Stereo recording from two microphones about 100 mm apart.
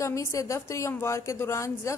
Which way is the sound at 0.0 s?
30° left (ahead or behind).